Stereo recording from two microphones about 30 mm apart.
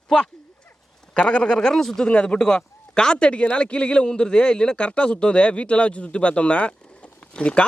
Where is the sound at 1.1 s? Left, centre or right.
Left.